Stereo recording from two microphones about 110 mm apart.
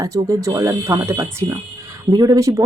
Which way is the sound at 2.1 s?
40° right (ahead or behind).